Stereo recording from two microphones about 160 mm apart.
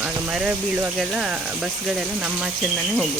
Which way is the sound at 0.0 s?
5° right (ahead or behind).